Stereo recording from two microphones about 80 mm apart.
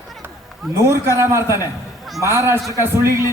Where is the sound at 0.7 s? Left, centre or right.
Right.